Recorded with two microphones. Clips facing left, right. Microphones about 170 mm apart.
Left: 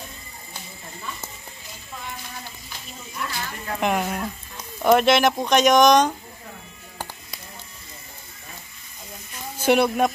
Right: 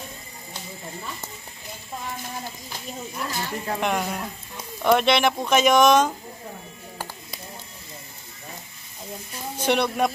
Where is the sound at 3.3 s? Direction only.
20° right (ahead or behind).